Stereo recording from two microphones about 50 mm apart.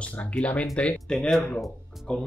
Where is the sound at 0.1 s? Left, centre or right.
Left.